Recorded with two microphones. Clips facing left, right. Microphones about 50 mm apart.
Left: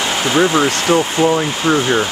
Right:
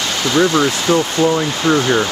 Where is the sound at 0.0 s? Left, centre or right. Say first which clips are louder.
Left 1 dB; left.